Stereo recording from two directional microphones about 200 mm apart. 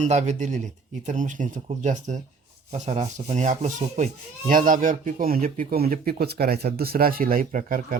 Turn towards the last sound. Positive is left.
turn(degrees=-45)  # may be behind; listen again after turning